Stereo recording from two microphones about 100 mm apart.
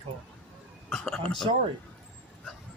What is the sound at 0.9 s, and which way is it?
Speech, 5° left (ahead or behind).